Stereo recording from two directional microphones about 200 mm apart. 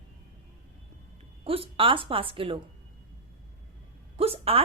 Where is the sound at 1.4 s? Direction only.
25° right (ahead or behind).